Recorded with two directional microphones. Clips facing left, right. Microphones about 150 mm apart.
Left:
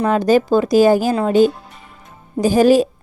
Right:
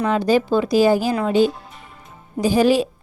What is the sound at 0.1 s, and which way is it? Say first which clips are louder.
A woman's voice: left 4 dB; 45° left (ahead or behind).